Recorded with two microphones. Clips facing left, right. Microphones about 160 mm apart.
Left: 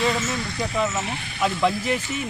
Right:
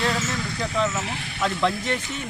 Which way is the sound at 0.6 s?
5° left (ahead or behind).